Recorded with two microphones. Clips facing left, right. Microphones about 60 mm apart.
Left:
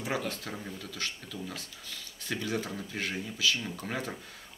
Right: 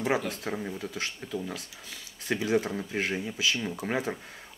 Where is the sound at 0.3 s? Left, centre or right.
Right.